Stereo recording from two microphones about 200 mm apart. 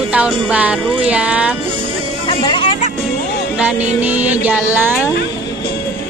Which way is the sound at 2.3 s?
25° left (ahead or behind).